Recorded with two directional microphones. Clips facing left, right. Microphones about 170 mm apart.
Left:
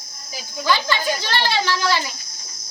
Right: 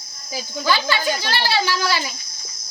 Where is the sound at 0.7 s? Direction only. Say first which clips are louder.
Even; 10° right (ahead or behind).